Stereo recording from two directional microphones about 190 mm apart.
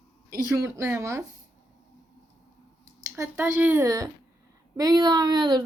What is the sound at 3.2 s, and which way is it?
Speech, 10° right (ahead or behind).